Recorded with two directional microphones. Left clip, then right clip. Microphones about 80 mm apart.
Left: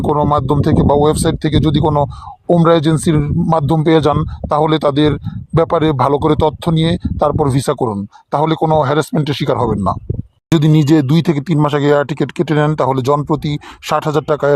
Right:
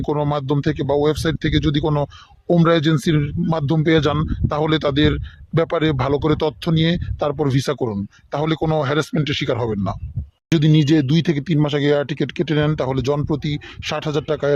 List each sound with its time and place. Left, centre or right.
0.1 s speech: left
10.8 s speech: left